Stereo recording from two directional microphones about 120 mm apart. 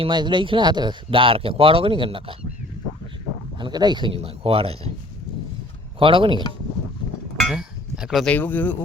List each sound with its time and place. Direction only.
0.0 s speech: 40° right (ahead or behind)
3.6 s speech: 35° right (ahead or behind); by 4.9 s 55° right (ahead or behind)
6.0 s speech: 45° right (ahead or behind)
7.3 s a sound: 5° right (ahead or behind)
8.3 s speech: 15° left (ahead or behind)